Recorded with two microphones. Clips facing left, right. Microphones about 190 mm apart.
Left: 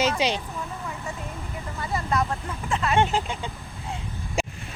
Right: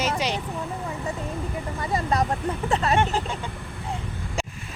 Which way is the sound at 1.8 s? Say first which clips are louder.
Right 1 dB; 30° right (ahead or behind).